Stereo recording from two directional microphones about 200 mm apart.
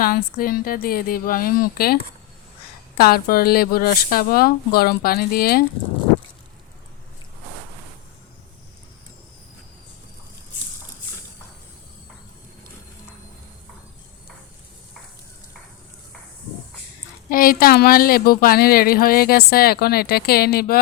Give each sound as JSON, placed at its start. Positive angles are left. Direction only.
{"t": 0.0, "sound": "speech", "side_deg": 45}
{"t": 3.0, "sound": "speech", "side_deg": 50}
{"t": 17.2, "sound": "speech", "side_deg": 45}